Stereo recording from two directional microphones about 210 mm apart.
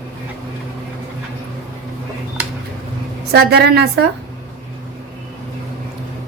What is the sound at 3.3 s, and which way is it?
Speech, 50° right (ahead or behind).